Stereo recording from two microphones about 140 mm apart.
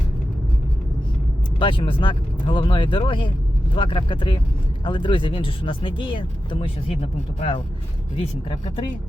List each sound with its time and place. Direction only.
1.5 s speech: 35° left (ahead or behind)